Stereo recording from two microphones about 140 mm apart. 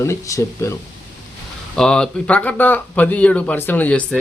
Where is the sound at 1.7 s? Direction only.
5° left (ahead or behind).